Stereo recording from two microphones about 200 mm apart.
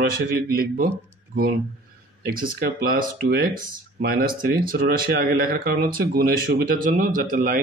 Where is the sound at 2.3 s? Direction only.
45° right (ahead or behind).